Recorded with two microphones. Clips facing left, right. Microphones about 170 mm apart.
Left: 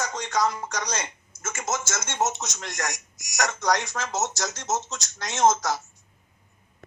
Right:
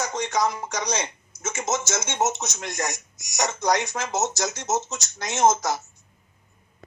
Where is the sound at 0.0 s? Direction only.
10° right (ahead or behind).